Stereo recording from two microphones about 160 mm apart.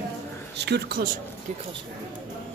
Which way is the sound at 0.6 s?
85° right.